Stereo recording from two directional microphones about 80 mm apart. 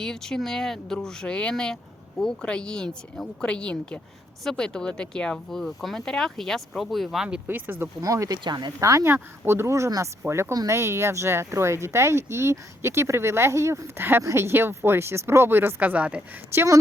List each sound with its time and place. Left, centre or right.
0.0 s speech: centre
7.4 s speech: right
8.0 s speech: right
8.4 s speech: right
8.8 s speech: right
10.5 s speech: right; by 16.2 s centre
16.5 s speech: right